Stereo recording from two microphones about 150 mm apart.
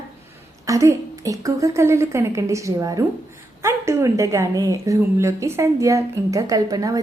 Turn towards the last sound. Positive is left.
turn(degrees=-25)  # may be behind; listen again after turning